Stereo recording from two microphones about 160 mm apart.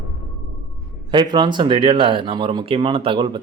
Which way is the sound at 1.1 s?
30° right (ahead or behind).